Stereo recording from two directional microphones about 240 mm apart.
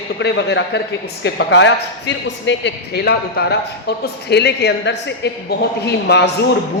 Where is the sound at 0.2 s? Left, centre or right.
Left.